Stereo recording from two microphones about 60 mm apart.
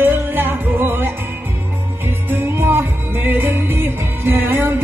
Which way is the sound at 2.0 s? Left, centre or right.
Right.